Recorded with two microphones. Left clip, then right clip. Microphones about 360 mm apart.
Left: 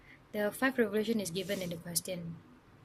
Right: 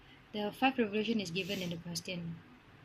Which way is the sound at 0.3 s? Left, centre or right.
Left.